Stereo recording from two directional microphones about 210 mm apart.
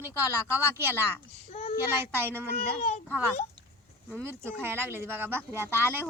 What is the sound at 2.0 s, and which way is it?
Speech, 10° right (ahead or behind).